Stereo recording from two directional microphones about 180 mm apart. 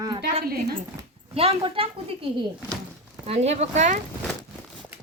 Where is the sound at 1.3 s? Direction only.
35° right (ahead or behind).